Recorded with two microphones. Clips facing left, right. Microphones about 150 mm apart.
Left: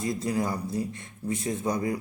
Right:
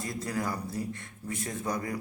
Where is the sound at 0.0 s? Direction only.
20° left (ahead or behind).